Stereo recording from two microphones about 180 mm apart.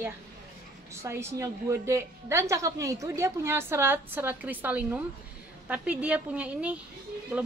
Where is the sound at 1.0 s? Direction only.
15° right (ahead or behind).